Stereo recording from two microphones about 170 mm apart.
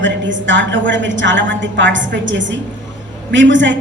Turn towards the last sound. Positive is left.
turn(degrees=-90)